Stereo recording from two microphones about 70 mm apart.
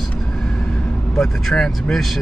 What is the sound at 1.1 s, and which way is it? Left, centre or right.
Speech, centre.